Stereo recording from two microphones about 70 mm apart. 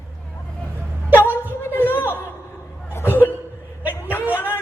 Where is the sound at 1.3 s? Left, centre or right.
Left.